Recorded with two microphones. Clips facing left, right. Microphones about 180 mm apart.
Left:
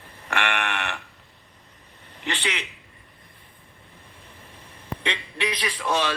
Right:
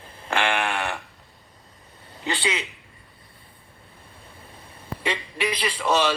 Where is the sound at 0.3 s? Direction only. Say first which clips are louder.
Right 3 dB; 30° right (ahead or behind).